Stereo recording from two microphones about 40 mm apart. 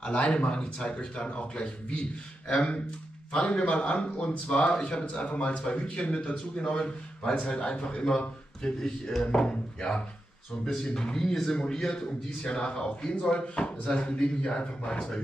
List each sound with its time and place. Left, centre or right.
0.0 s a man's voice: left
1.3 s a man's voice: left